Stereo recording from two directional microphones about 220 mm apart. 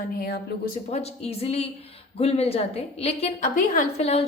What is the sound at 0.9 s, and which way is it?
Speech, 25° left (ahead or behind).